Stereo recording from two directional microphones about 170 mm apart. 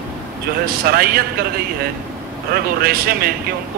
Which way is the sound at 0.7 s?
65° right (ahead or behind).